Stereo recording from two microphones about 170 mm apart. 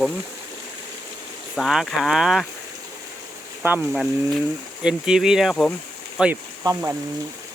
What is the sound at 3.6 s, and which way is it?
Speech, 10° right (ahead or behind).